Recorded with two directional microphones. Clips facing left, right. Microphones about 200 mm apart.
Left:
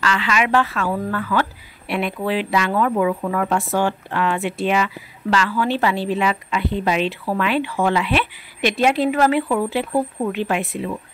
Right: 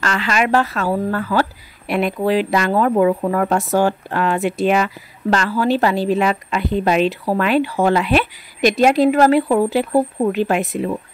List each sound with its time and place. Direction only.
0.0 s a woman's voice: 40° right (ahead or behind)